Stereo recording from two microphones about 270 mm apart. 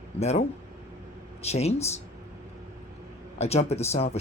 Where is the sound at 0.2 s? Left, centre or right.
Left.